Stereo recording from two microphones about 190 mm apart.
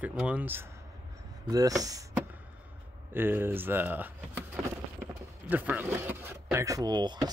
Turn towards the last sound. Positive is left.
turn(degrees=-25)  # may be behind; listen again after turning